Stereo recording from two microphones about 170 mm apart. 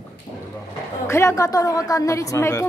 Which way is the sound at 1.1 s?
15° left (ahead or behind).